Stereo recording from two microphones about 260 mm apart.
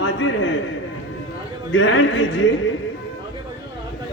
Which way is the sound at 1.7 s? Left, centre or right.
Left.